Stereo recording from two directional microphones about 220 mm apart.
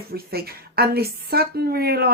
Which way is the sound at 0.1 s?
45° right (ahead or behind).